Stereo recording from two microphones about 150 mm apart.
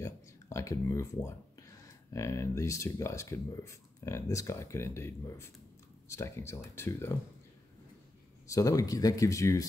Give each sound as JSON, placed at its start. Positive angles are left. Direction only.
{"t": 0.0, "sound": "speech", "side_deg": 20}
{"t": 8.5, "sound": "speech", "side_deg": 20}